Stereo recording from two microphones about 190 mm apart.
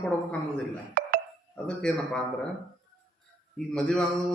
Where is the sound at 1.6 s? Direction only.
5° left (ahead or behind).